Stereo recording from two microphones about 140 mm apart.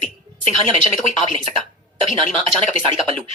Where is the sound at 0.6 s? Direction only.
40° right (ahead or behind).